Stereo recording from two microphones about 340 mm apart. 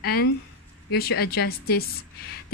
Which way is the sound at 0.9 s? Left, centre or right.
Left.